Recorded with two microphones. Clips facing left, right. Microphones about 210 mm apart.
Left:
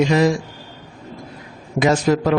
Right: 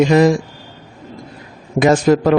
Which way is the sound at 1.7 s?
50° right (ahead or behind).